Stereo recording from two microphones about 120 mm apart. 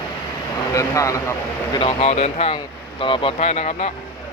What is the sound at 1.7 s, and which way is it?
Speech, 50° left (ahead or behind).